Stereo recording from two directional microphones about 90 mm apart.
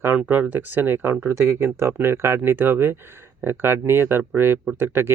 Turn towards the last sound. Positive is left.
turn(degrees=-25)  # may be behind; listen again after turning